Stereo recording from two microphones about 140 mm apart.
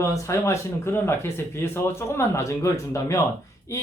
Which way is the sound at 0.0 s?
20° left (ahead or behind).